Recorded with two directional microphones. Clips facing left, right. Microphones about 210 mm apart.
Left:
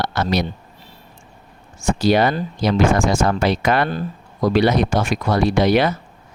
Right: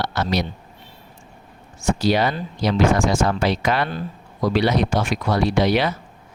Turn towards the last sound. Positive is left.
turn(degrees=50)  # may be behind; listen again after turning